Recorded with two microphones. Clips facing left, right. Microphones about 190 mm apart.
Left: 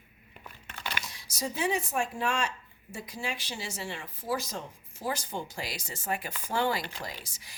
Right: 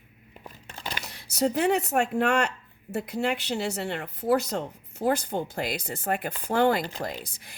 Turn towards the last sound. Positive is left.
turn(degrees=-55)  # may be behind; listen again after turning